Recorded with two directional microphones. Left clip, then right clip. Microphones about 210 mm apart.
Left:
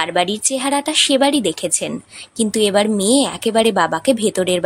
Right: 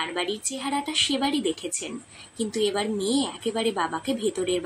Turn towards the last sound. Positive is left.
turn(degrees=55)  # may be behind; listen again after turning